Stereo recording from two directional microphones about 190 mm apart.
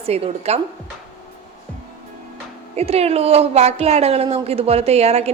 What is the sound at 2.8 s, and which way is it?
A woman's voice, 35° right (ahead or behind).